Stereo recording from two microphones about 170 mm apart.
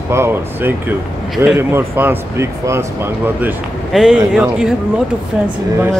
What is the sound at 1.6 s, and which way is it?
Speech, 15° right (ahead or behind).